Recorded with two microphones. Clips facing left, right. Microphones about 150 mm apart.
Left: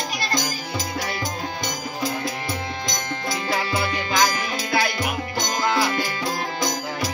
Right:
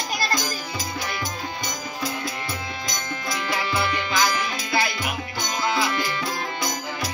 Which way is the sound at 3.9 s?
45° left (ahead or behind).